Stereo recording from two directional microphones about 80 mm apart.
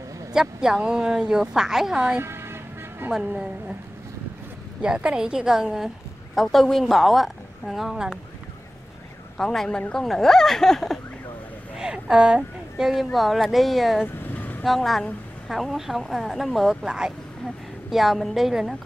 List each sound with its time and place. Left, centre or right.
0.3 s a woman's voice: centre
2.1 s toot: right
3.1 s a woman's voice: centre
4.8 s a woman's voice: centre
9.4 s a woman's voice: centre
11.7 s speech: centre
14.0 s vehicle: left
14.6 s a woman's voice: centre